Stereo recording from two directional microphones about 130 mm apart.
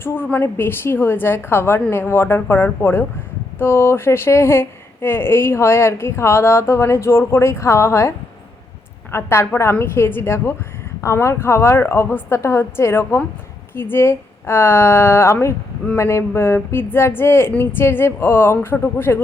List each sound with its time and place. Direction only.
0.0 s speech: 15° left (ahead or behind)
9.1 s speech: 20° left (ahead or behind)